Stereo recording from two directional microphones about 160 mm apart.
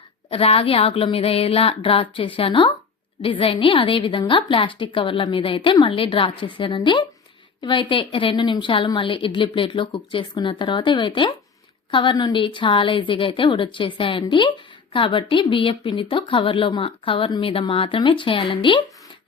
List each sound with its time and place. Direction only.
0.3 s speech: 35° left (ahead or behind)